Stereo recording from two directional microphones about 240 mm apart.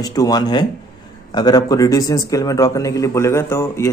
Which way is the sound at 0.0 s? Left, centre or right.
Centre.